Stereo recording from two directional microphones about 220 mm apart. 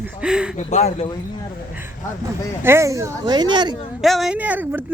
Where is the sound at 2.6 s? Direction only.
15° right (ahead or behind).